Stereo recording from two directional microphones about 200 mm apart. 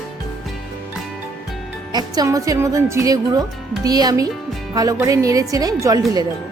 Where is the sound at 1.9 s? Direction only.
20° right (ahead or behind).